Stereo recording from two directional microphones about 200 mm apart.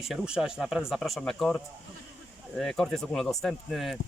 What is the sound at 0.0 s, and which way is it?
Speech, 5° right (ahead or behind).